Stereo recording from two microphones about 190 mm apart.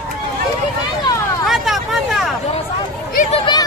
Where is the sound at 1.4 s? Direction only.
Centre (ahead or behind).